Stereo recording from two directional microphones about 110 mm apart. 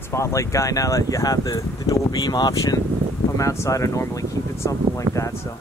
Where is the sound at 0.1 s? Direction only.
25° left (ahead or behind).